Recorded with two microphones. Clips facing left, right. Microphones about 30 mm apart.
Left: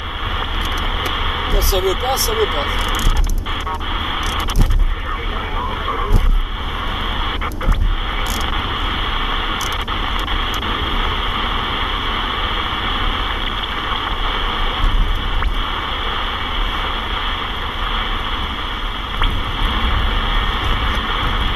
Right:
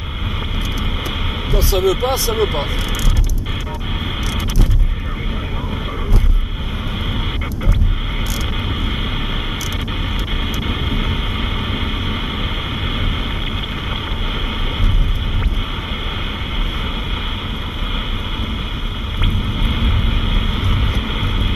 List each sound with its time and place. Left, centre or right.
1.6 s speech: centre
1.9 s speech: centre
2.3 s speech: centre
10.7 s a sound: centre